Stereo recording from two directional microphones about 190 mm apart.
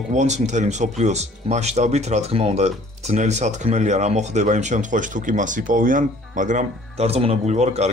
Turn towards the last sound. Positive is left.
turn(degrees=-35)  # may be behind; listen again after turning